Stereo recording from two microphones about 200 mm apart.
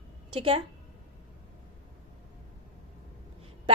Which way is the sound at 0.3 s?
30° right (ahead or behind).